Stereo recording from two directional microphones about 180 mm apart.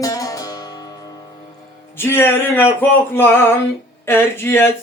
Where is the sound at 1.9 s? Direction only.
15° left (ahead or behind).